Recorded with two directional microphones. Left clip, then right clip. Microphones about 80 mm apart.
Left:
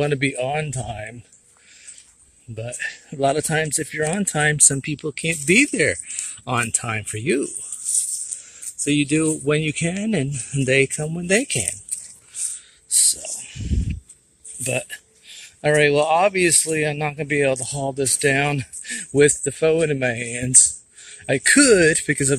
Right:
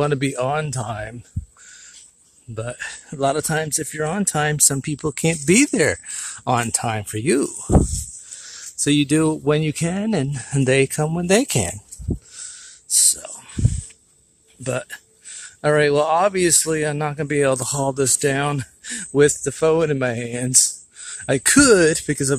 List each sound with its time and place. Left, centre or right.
0.0 s speech: right
2.5 s speech: right
3.1 s speech: centre
3.4 s speech: centre
4.8 s speech: right
8.8 s speech: right; by 10.2 s centre
10.2 s speech: right
11.4 s speech: right
13.1 s a sound: right
14.6 s speech: right
18.2 s speech: centre